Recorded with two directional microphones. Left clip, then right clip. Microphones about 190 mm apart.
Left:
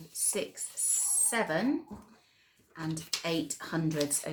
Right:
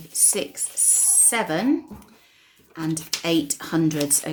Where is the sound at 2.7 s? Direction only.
40° right (ahead or behind).